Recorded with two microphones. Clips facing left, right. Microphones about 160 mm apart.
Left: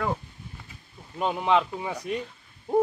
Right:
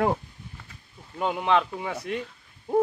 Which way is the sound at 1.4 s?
15° left (ahead or behind).